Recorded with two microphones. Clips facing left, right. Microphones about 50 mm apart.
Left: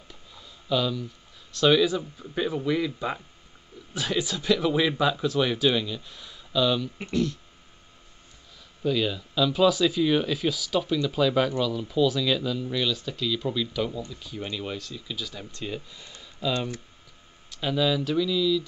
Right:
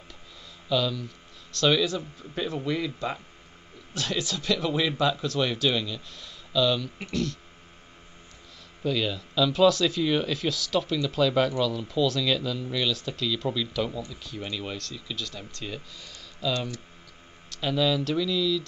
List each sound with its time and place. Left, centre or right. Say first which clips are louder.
0.7 s speech: even; centre
8.8 s speech: left 2 dB; centre; by 16.8 s left
17.5 s speech: even; centre